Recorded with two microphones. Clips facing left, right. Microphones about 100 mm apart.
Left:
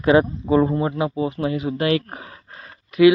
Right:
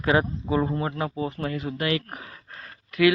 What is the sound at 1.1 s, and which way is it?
Speech, 10° left (ahead or behind).